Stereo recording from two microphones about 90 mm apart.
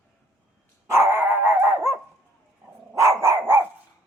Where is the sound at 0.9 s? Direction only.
30° right (ahead or behind).